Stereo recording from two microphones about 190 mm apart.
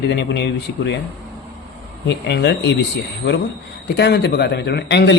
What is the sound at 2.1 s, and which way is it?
Speech, 65° left (ahead or behind).